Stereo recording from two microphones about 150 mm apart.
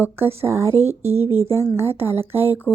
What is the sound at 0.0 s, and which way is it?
Speech, 15° right (ahead or behind).